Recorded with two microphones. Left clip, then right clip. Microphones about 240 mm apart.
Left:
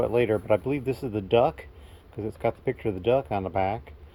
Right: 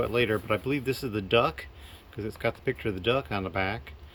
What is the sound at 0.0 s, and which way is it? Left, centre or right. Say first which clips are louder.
Speech: left 3 dB; centre.